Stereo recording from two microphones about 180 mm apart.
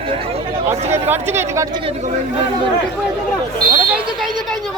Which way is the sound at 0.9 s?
15° right (ahead or behind).